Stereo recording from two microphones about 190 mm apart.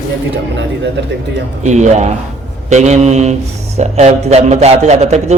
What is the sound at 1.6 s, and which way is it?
A man's voice, 35° right (ahead or behind).